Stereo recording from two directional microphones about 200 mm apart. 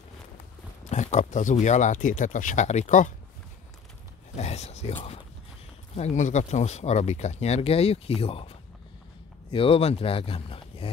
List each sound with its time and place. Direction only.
0.8 s speech: 35° left (ahead or behind)
4.4 s a sound: 35° left (ahead or behind)
5.9 s speech: 35° left (ahead or behind)